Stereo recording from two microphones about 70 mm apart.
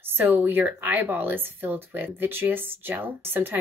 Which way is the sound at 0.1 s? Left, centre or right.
Right.